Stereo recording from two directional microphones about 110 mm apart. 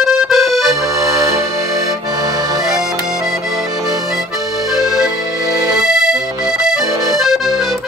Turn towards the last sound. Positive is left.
turn(degrees=0)  # may be behind; listen again after turning